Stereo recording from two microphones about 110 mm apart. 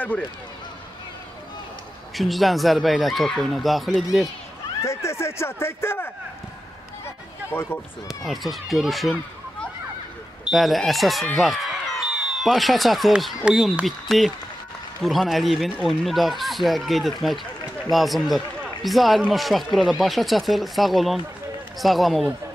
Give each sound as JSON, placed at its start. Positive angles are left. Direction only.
{"t": 2.1, "sound": "speech", "side_deg": 0}
{"t": 4.8, "sound": "speech", "side_deg": 25}
{"t": 7.5, "sound": "speech", "side_deg": 20}
{"t": 8.1, "sound": "speech", "side_deg": 0}
{"t": 10.4, "sound": "speech", "side_deg": 0}
{"t": 11.4, "sound": "a sound", "side_deg": 0}
{"t": 13.4, "sound": "speech", "side_deg": -5}